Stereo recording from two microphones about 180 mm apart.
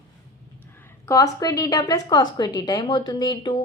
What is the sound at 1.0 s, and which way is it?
Speech, 20° left (ahead or behind).